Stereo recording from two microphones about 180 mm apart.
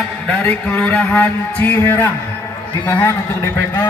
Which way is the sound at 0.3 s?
10° left (ahead or behind).